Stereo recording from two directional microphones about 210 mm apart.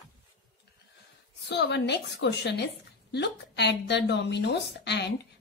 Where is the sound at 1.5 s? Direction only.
55° left (ahead or behind).